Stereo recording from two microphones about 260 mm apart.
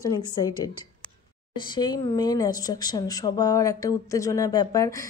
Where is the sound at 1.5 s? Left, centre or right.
Centre.